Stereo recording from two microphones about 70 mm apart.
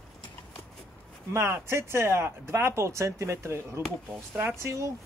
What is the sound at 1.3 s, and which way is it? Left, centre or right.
Speech, right.